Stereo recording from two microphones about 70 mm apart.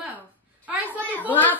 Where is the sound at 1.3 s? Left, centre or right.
Left.